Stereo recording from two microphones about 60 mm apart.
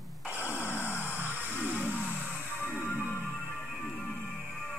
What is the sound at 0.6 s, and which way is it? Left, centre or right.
Vehicle, left.